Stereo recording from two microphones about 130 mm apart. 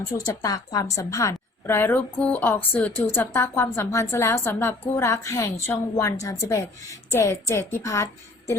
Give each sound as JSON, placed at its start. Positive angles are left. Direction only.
{"t": 0.3, "sound": "a woman's voice", "side_deg": 30}